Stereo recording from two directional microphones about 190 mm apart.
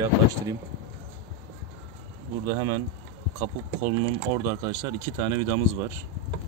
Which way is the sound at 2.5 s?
25° right (ahead or behind).